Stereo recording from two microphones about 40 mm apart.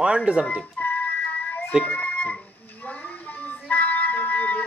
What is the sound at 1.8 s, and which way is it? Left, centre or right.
Speech, left.